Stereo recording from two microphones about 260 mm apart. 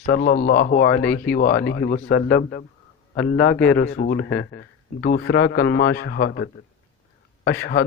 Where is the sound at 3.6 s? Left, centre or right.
Left.